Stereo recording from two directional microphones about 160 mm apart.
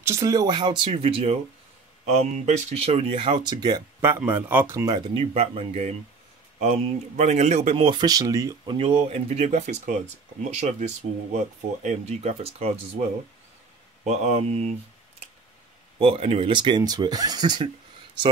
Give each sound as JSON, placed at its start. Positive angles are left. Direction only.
{"t": 0.0, "sound": "speech", "side_deg": -20}
{"t": 4.4, "sound": "speech", "side_deg": -10}
{"t": 8.7, "sound": "speech", "side_deg": -35}
{"t": 14.0, "sound": "speech", "side_deg": -45}
{"t": 16.0, "sound": "speech", "side_deg": -35}